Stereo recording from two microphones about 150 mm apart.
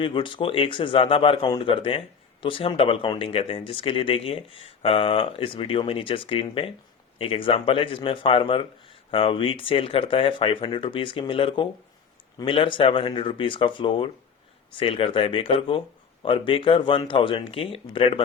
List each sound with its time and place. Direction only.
0.0 s a man's voice: 35° left (ahead or behind)